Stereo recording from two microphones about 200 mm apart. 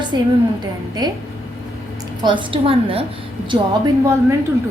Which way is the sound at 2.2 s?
25° right (ahead or behind).